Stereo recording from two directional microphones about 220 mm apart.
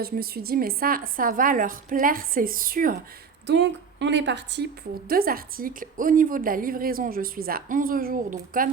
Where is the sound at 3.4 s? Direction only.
55° right (ahead or behind).